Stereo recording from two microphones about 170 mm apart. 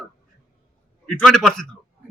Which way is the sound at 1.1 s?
5° left (ahead or behind).